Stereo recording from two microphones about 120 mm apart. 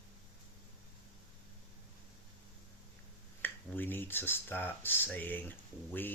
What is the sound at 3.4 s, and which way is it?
Speech, 15° left (ahead or behind).